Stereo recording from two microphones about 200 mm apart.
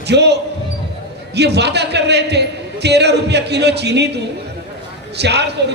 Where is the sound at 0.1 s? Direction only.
55° right (ahead or behind).